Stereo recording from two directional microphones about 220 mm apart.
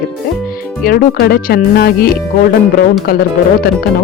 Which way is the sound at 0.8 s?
45° left (ahead or behind).